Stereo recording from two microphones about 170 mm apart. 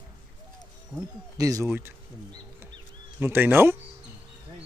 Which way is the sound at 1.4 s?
20° right (ahead or behind).